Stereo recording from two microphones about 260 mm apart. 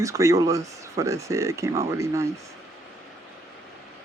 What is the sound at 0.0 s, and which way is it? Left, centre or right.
Speech, centre.